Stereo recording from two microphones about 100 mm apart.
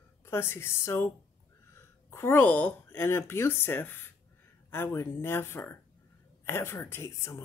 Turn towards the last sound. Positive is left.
turn(degrees=25)  # may be behind; listen again after turning